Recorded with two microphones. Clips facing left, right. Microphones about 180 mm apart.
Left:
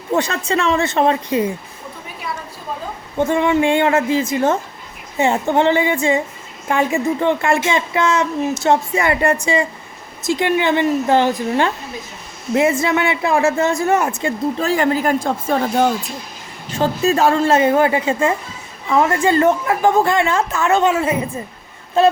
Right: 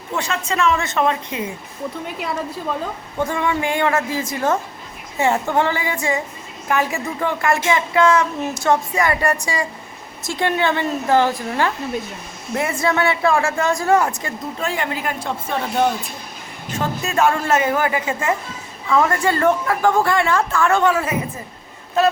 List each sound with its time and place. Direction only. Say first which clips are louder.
0.1 s a woman's voice: left 5 dB; 35° left (ahead or behind)
3.2 s a woman's voice: left 6 dB; 25° left (ahead or behind)
14.7 s speech: left 10 dB; 40° left (ahead or behind)
16.7 s a woman's voice: left 5 dB; 35° left (ahead or behind)